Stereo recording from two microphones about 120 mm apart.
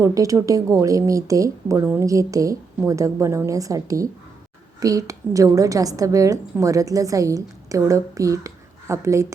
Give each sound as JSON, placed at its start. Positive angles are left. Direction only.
{"t": 0.0, "sound": "a woman's voice", "side_deg": -30}